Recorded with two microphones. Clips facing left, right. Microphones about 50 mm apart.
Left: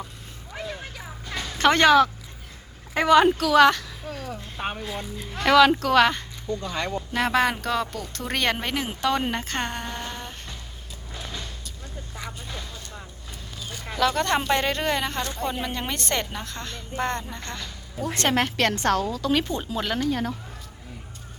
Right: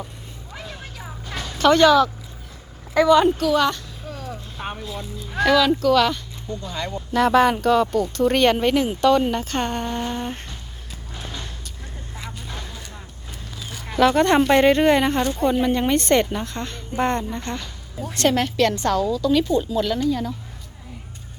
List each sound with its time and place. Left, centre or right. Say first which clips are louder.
0.5 s music: left 2 dB; centre
1.5 s a woman's voice: right 2 dB; left
3.1 s a woman's voice: even; left
5.5 s a woman's voice: even; left
7.1 s speech: right 7 dB; centre
8.9 s speech: right 5 dB; centre
9.5 s speech: right 5 dB; centre
10.2 s a sound: right 9 dB; right
14.0 s a woman's voice: right 7 dB; centre
14.3 s speech: right 7 dB; centre
14.6 s a woman's voice: right 9 dB; centre
18.1 s a woman's voice: right 4 dB; left
18.7 s a woman's voice: right 3 dB; left
20.1 s a woman's voice: right 3 dB; left